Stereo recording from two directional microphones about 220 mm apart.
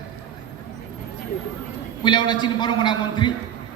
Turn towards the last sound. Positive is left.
turn(degrees=20)  # may be behind; listen again after turning